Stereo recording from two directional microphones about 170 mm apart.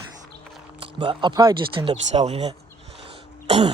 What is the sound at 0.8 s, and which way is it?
Speech, 30° right (ahead or behind).